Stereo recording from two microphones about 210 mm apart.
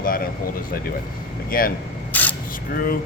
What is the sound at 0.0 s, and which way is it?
Speech, 45° left (ahead or behind).